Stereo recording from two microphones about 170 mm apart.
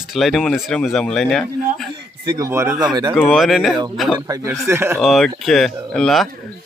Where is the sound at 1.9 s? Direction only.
25° right (ahead or behind).